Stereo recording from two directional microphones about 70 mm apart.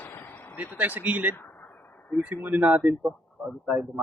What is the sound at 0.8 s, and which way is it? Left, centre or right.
Speech, right.